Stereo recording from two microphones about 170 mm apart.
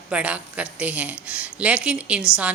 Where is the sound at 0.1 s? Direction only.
10° right (ahead or behind).